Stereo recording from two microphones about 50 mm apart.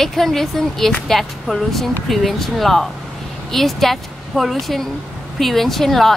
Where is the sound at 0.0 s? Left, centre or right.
Centre.